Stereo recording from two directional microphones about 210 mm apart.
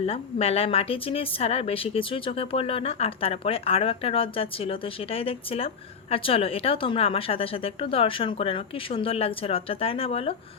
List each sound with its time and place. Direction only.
0.0 s speech: 30° left (ahead or behind)